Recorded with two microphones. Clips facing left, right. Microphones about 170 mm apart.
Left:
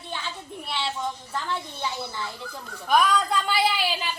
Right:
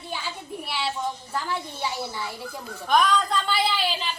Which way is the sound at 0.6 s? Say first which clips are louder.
Right 1 dB; 5° right (ahead or behind).